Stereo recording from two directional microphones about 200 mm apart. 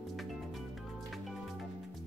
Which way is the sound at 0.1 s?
Centre (ahead or behind).